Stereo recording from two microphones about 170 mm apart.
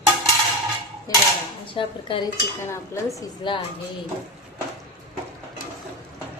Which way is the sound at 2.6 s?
15° left (ahead or behind).